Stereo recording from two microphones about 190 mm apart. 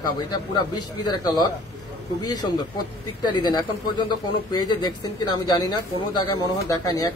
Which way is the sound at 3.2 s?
20° left (ahead or behind).